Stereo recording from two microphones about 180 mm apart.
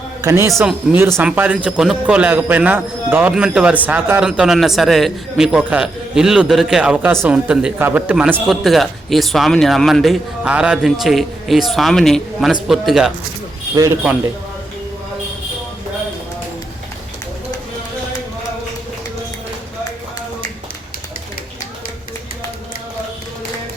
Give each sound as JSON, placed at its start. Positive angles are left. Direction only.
{"t": 0.2, "sound": "a man's voice", "side_deg": -15}
{"t": 0.5, "sound": "speech", "side_deg": 0}
{"t": 0.9, "sound": "speech", "side_deg": -15}